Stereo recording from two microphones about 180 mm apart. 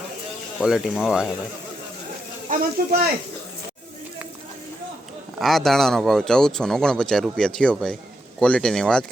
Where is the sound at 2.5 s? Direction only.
55° right (ahead or behind).